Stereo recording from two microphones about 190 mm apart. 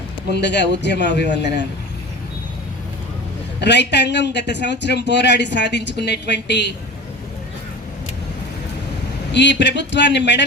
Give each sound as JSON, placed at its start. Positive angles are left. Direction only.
{"t": 0.3, "sound": "speech", "side_deg": 65}
{"t": 3.6, "sound": "speech", "side_deg": 65}
{"t": 9.3, "sound": "a man's voice", "side_deg": 65}